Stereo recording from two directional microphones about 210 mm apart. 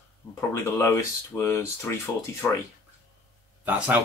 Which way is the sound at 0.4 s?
10° left (ahead or behind).